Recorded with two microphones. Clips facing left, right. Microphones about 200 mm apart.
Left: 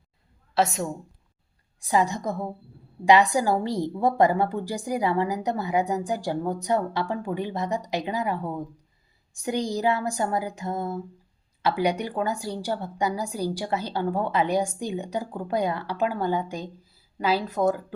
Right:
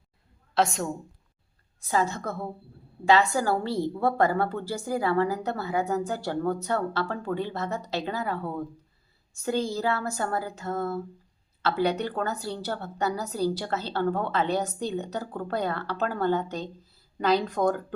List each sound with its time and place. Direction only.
0.5 s a woman's voice: centre (ahead or behind)
1.8 s a woman's voice: 15° left (ahead or behind)